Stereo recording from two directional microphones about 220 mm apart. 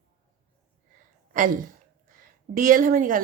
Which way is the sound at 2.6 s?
40° right (ahead or behind).